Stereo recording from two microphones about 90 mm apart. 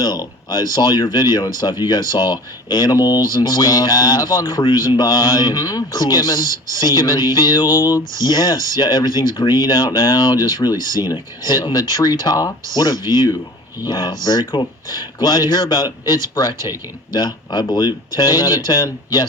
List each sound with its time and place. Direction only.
0.0 s speech: 50° left (ahead or behind)